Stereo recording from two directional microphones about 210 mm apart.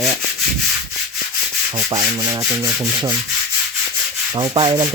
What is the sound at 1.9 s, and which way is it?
Rub, 15° right (ahead or behind).